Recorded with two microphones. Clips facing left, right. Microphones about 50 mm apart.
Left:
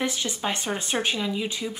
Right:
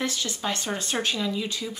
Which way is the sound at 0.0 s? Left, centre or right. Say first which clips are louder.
Left 1 dB; centre.